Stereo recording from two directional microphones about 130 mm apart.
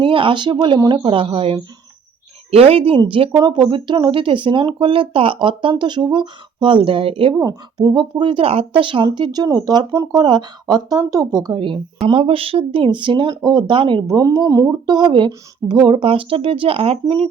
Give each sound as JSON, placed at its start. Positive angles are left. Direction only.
{"t": 0.0, "sound": "speech", "side_deg": -40}
{"t": 7.3, "sound": "speech", "side_deg": -30}